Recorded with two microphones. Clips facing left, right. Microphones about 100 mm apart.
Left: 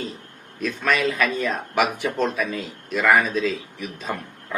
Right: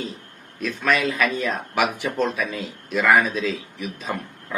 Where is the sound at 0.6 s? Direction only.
Centre (ahead or behind).